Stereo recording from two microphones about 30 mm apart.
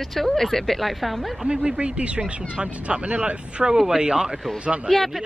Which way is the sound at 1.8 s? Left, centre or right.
Right.